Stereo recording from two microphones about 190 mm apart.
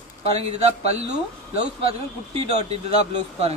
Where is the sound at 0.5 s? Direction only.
35° right (ahead or behind).